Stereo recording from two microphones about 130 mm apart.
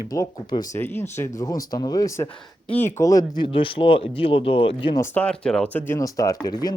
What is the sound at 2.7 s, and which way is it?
Speech, 15° left (ahead or behind).